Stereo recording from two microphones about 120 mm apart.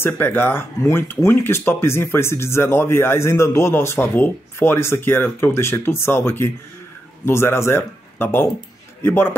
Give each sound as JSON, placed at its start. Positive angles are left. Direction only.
{"t": 0.0, "sound": "speech", "side_deg": 15}